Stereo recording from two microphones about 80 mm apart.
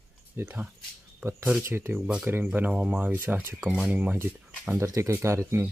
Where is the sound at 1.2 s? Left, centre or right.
Right; by 4.2 s centre.